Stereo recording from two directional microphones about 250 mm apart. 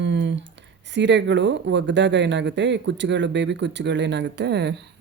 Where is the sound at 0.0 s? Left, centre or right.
Right.